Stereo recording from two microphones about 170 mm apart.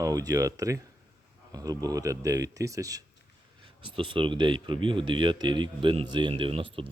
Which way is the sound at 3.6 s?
30° right (ahead or behind).